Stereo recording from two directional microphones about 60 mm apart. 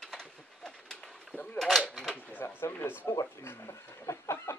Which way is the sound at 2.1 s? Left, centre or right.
Left.